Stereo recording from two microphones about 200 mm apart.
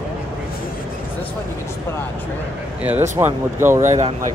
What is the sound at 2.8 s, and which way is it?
Speech, 10° right (ahead or behind).